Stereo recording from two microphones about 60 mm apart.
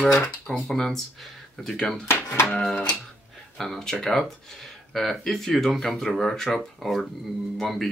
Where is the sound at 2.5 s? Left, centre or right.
Centre.